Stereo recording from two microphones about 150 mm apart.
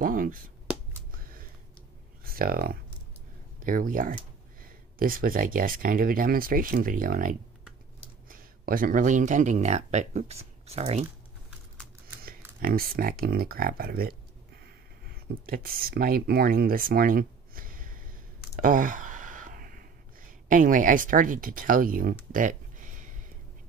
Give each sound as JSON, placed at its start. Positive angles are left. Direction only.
{"t": 0.0, "sound": "speech", "side_deg": -70}
{"t": 1.1, "sound": "a sound", "side_deg": -70}
{"t": 2.2, "sound": "speech", "side_deg": -75}
{"t": 3.5, "sound": "speech", "side_deg": -65}
{"t": 12.6, "sound": "speech", "side_deg": -75}
{"t": 15.4, "sound": "speech", "side_deg": -75}
{"t": 18.6, "sound": "a sound", "side_deg": -65}